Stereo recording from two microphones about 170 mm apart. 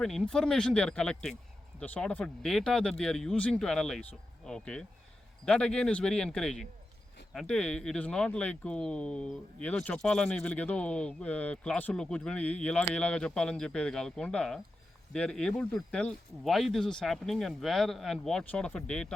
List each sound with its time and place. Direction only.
0.0 s speech: centre (ahead or behind)